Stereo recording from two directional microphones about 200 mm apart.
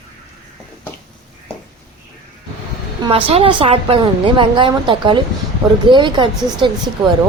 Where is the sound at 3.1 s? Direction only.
30° right (ahead or behind).